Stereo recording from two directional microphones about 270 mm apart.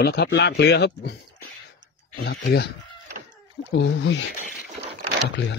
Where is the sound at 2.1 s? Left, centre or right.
Left.